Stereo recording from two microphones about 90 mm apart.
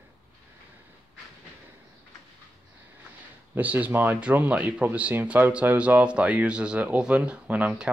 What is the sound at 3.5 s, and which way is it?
Speech, 20° right (ahead or behind).